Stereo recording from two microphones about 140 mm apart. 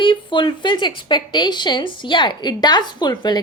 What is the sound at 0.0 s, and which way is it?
A woman's voice, 35° left (ahead or behind).